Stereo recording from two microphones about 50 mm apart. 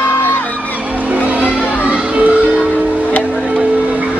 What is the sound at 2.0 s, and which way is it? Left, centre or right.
Music, right.